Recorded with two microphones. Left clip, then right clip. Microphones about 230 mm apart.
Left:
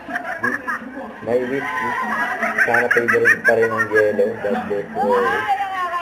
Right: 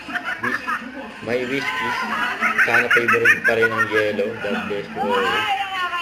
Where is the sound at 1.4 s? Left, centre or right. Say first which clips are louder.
Left 1 dB; centre.